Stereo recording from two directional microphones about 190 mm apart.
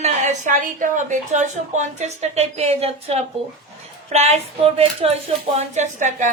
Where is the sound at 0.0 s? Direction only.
40° right (ahead or behind).